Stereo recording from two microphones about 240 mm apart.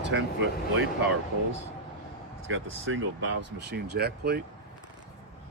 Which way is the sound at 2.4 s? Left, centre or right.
Right.